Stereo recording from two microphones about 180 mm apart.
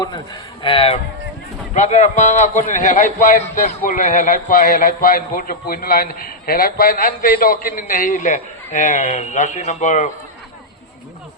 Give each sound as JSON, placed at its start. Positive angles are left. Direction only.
{"t": 0.6, "sound": "a man's voice", "side_deg": 30}